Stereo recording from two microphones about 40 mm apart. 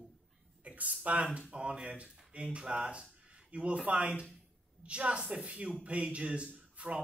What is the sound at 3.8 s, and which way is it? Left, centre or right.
Speech, right.